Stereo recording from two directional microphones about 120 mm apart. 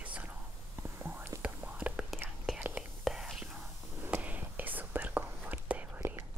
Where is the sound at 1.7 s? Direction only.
5° right (ahead or behind).